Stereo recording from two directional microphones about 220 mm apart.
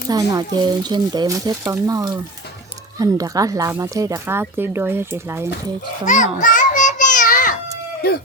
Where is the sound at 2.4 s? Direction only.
50° left (ahead or behind).